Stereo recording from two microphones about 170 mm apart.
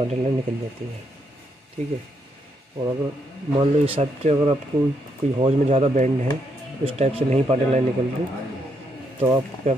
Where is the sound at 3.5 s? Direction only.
35° right (ahead or behind).